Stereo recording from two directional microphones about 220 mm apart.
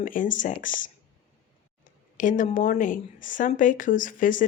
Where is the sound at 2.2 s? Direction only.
35° left (ahead or behind).